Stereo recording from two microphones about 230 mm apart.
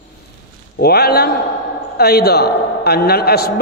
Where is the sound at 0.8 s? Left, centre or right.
Left.